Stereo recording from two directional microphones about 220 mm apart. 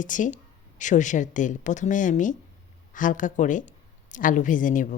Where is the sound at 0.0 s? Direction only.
35° left (ahead or behind).